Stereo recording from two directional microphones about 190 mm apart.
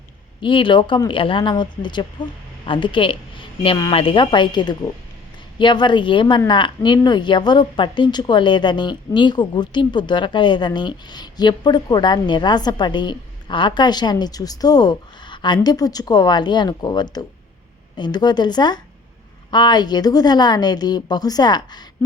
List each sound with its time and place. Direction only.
0.4 s a woman's voice: 25° left (ahead or behind)